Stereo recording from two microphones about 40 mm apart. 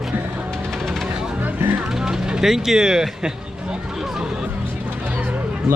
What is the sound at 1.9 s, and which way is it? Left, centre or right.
Vehicle, centre.